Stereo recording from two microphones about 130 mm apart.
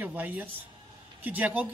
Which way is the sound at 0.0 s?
15° right (ahead or behind).